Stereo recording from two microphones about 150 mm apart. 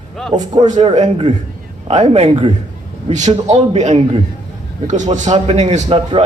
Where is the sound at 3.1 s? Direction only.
50° right (ahead or behind).